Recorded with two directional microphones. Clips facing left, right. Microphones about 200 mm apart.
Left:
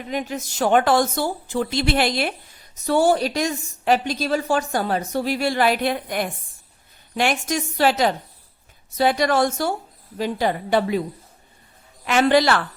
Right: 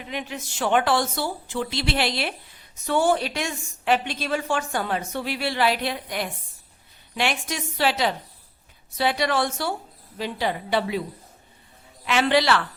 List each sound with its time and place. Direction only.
0.1 s a woman's voice: 40° left (ahead or behind)
12.0 s speech: 45° left (ahead or behind)